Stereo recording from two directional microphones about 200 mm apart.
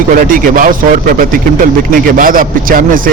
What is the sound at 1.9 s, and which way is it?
A man's voice, 45° right (ahead or behind).